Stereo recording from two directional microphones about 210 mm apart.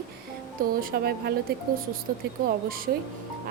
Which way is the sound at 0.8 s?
45° right (ahead or behind).